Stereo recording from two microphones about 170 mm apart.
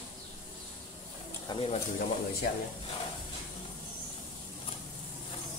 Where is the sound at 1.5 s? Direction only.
25° left (ahead or behind).